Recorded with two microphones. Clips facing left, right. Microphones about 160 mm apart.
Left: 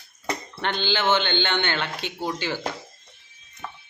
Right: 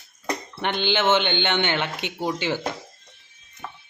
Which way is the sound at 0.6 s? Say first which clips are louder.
Right 2 dB; 15° right (ahead or behind).